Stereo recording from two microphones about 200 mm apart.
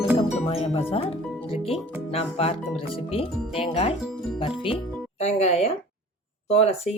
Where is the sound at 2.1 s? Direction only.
30° left (ahead or behind).